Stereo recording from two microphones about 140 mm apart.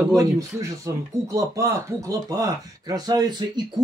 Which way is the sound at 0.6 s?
25° right (ahead or behind).